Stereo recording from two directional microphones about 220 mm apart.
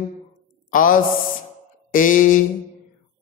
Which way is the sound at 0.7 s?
40° left (ahead or behind).